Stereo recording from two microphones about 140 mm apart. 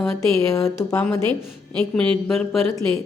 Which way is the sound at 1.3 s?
10° left (ahead or behind).